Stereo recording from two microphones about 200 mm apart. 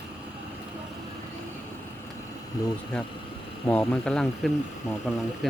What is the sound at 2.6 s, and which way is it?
Speech, 15° left (ahead or behind).